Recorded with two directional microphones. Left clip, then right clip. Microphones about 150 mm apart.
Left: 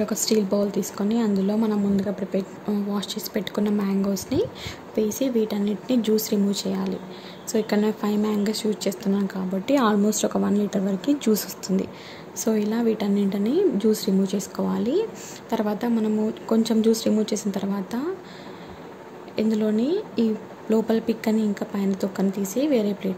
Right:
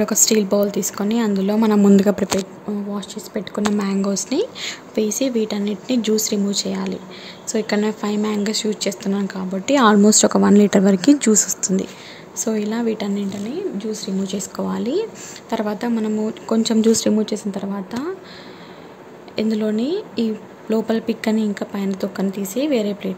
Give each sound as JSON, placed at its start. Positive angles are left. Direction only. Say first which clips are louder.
{"t": 0.0, "sound": "speech", "louder": "right 6 dB", "side_deg": -5}
{"t": 2.0, "sound": "speech", "louder": "right 10 dB", "side_deg": -30}
{"t": 2.9, "sound": "speech", "louder": "even", "side_deg": -5}
{"t": 13.5, "sound": "speech", "louder": "left 7 dB", "side_deg": 45}
{"t": 14.2, "sound": "speech", "louder": "right 1 dB", "side_deg": 0}
{"t": 16.9, "sound": "speech", "louder": "right 4 dB", "side_deg": -15}
{"t": 19.3, "sound": "speech", "louder": "right 2 dB", "side_deg": -5}